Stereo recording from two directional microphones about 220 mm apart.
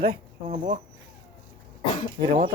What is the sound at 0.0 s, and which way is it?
Speech, 30° right (ahead or behind).